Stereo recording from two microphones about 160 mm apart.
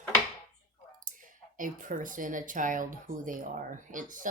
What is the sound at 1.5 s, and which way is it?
Speech, 55° right (ahead or behind).